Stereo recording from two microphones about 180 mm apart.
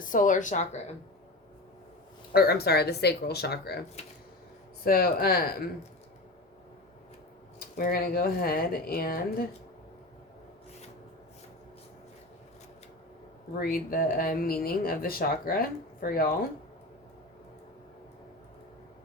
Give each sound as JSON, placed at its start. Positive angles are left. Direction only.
{"t": 0.0, "sound": "speech", "side_deg": 45}
{"t": 2.3, "sound": "speech", "side_deg": 60}
{"t": 4.9, "sound": "speech", "side_deg": 60}
{"t": 7.8, "sound": "speech", "side_deg": 55}
{"t": 13.6, "sound": "speech", "side_deg": 55}